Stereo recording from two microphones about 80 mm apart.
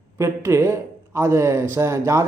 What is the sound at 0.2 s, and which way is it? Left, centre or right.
A man's voice, right.